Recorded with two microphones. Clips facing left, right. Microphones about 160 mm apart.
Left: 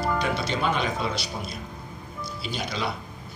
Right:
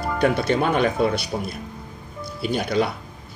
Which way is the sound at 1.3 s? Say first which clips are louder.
Right 7 dB; 35° right (ahead or behind).